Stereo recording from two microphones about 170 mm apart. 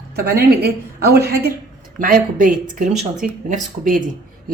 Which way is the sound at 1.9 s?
55° right (ahead or behind).